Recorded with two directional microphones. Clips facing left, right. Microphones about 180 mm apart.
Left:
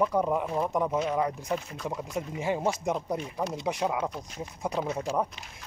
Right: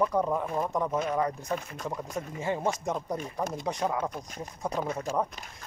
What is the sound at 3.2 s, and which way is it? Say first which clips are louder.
Speech: left 1 dB; 50° right (ahead or behind).